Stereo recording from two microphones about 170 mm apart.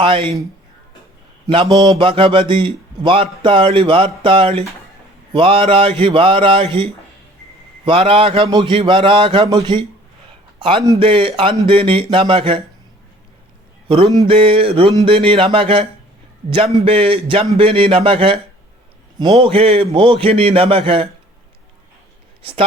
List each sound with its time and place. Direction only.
0.0 s speech: 30° right (ahead or behind)
1.5 s speech: 30° right (ahead or behind)
7.9 s a man's voice: 35° right (ahead or behind)
13.8 s speech: 30° right (ahead or behind)